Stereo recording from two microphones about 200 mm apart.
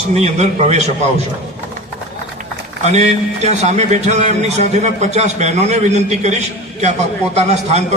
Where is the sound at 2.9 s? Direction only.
35° right (ahead or behind).